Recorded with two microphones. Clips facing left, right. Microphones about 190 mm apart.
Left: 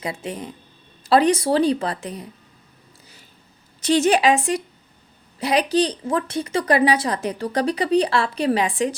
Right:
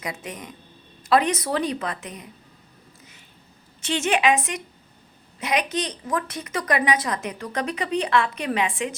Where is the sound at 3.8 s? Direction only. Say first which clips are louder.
Left 6 dB; 40° left (ahead or behind).